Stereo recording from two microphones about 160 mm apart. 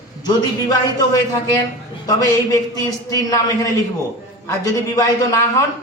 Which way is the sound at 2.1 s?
20° left (ahead or behind).